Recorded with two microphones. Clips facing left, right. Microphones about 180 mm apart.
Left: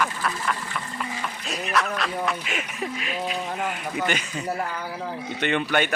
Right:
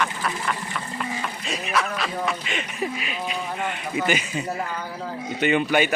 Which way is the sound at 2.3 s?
5° left (ahead or behind).